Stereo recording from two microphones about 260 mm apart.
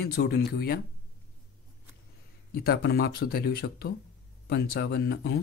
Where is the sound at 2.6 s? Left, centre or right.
Left.